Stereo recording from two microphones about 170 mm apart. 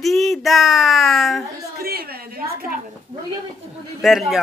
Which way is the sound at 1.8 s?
65° right (ahead or behind).